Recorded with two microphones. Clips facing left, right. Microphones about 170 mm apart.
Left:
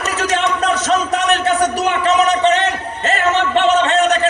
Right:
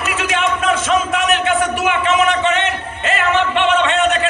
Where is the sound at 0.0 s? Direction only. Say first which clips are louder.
Left 1 dB; 40° left (ahead or behind).